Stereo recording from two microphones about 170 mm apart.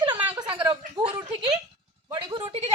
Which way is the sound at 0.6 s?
30° right (ahead or behind).